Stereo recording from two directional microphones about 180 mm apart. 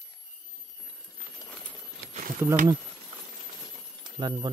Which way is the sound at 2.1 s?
45° right (ahead or behind).